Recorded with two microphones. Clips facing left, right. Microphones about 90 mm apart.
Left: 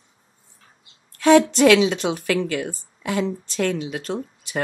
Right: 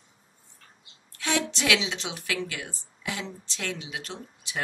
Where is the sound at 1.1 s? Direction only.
50° left (ahead or behind).